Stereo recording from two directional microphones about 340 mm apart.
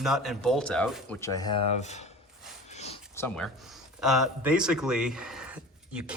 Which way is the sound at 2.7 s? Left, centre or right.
Centre.